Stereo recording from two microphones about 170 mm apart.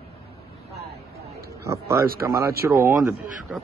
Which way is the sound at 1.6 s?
15° right (ahead or behind).